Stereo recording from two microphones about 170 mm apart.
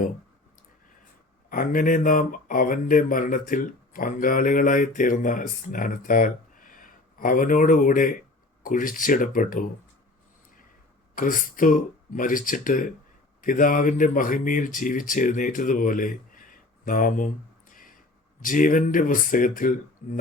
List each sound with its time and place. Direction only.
1.5 s speech: 55° left (ahead or behind)
11.1 s speech: 50° left (ahead or behind)